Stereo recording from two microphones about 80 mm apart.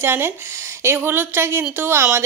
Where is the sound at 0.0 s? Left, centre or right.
Right.